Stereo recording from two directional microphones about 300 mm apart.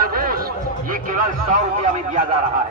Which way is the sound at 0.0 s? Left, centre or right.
Right.